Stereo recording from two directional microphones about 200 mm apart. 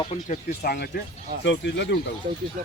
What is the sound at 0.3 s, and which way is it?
Speech, 50° left (ahead or behind).